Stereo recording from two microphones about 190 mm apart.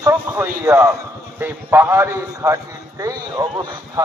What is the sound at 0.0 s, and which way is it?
A man's voice, 10° right (ahead or behind).